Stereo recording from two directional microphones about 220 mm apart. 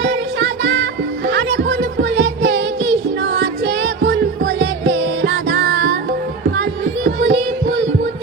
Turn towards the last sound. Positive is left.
turn(degrees=-55)  # may be behind; listen again after turning